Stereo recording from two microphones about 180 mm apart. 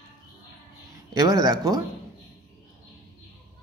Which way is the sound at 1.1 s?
20° right (ahead or behind).